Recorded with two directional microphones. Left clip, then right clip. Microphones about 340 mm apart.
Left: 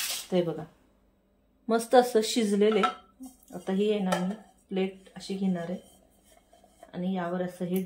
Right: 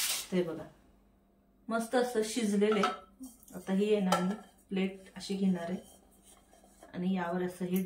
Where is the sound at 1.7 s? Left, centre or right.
Centre.